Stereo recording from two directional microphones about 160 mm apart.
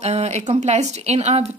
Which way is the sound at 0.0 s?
45° right (ahead or behind).